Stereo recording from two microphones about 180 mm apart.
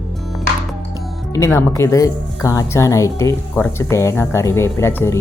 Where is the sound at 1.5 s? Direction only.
15° left (ahead or behind).